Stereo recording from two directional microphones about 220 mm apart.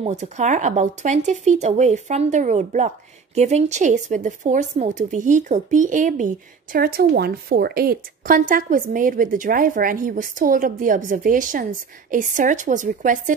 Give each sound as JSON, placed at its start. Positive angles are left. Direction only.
{"t": 0.0, "sound": "a woman's voice", "side_deg": -30}